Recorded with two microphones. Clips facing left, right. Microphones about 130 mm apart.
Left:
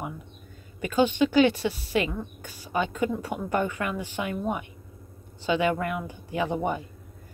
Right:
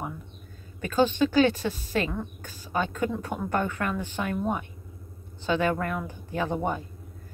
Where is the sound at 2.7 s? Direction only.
15° left (ahead or behind).